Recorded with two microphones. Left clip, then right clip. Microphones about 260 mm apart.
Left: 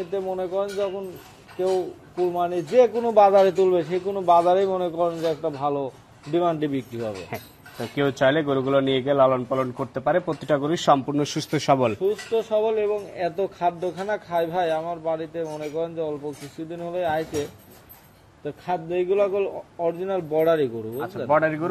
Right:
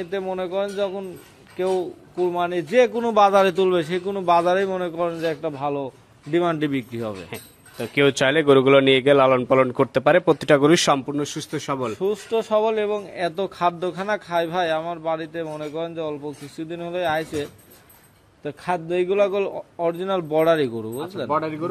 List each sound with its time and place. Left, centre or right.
0.1 s a man's voice: right
2.3 s a man's voice: right
11.1 s a man's voice: centre
12.0 s a man's voice: right
21.3 s speech: centre